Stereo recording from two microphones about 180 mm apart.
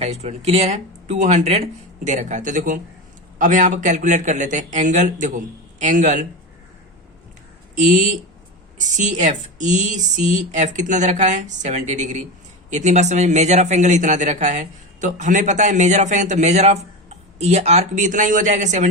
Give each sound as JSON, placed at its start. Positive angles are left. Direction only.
{"t": 0.0, "sound": "a man's voice", "side_deg": -35}
{"t": 7.9, "sound": "a man's voice", "side_deg": -45}